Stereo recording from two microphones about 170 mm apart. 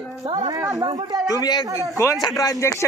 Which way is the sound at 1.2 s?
20° left (ahead or behind).